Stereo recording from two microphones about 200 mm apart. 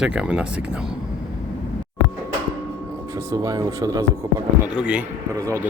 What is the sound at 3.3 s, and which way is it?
Speech, 15° right (ahead or behind).